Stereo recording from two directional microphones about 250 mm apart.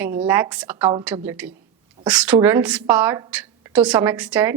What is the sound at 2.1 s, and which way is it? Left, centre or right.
A woman's voice, centre.